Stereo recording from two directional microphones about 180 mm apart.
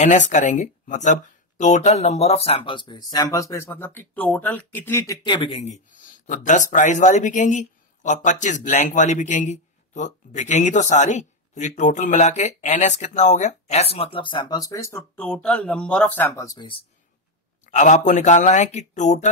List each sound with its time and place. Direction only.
0.3 s speech: 40° left (ahead or behind); by 5.3 s 20° left (ahead or behind)
5.3 s speech: 30° left (ahead or behind)
17.6 s speech: 40° left (ahead or behind)